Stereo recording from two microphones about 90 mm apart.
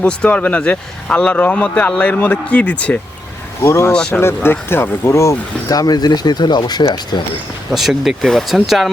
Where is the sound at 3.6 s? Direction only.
30° left (ahead or behind); by 7.2 s 50° left (ahead or behind).